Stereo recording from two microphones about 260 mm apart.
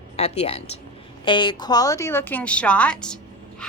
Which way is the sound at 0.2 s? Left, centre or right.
Left.